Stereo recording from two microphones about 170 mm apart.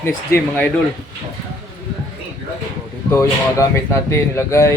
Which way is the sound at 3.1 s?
15° left (ahead or behind).